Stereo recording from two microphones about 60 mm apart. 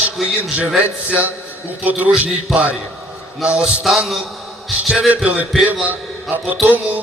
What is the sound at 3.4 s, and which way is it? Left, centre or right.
A man's voice, centre.